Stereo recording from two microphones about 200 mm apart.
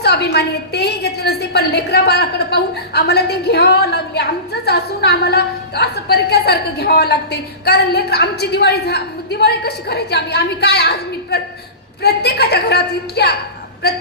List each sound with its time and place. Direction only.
0.0 s a woman's voice: 55° left (ahead or behind)